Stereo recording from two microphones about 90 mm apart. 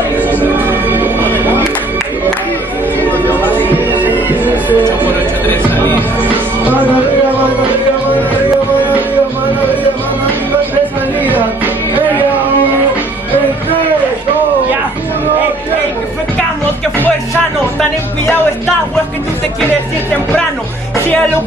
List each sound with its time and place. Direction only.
0.2 s music: 20° right (ahead or behind)
3.0 s music: 20° left (ahead or behind)
4.0 s music: 20° right (ahead or behind)
5.5 s music: 25° left (ahead or behind)
11.2 s music: 20° right (ahead or behind)